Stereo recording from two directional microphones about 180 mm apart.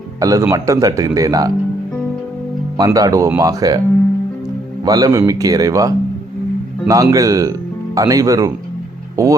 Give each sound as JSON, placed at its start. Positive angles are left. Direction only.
{"t": 0.2, "sound": "speech", "side_deg": -20}
{"t": 2.7, "sound": "speech", "side_deg": -20}
{"t": 4.9, "sound": "speech", "side_deg": -20}